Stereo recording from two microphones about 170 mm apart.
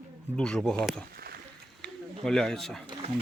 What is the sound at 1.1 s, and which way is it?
Rowboat, 65° right (ahead or behind).